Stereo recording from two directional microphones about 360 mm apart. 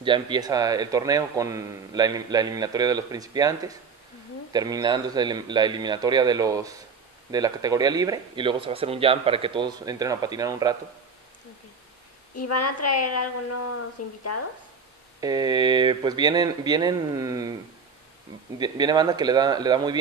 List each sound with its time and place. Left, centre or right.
0.0 s a man's voice: centre
12.4 s a woman's voice: left
15.1 s a man's voice: centre
18.6 s a man's voice: centre